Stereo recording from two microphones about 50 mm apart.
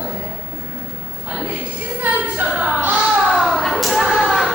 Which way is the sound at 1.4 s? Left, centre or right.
Right.